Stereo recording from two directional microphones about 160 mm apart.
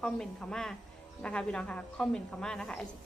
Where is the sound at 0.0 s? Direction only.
5° left (ahead or behind).